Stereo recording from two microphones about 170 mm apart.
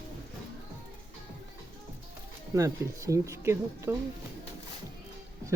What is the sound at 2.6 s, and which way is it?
Speech, 20° right (ahead or behind).